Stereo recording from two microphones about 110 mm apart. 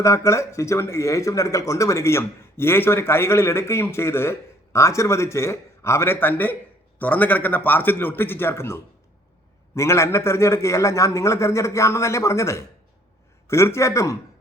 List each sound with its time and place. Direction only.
0.0 s a man's voice: 25° left (ahead or behind)